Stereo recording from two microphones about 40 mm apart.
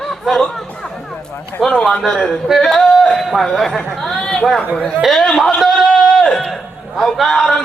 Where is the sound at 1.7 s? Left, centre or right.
Left.